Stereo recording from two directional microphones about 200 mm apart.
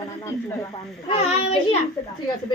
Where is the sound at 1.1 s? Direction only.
30° left (ahead or behind).